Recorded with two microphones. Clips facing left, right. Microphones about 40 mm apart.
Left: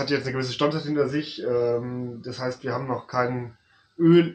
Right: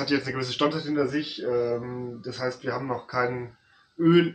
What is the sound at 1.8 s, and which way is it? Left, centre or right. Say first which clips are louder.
Speech: left 2 dB; centre.